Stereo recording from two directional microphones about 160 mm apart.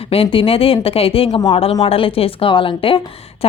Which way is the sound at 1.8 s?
35° left (ahead or behind).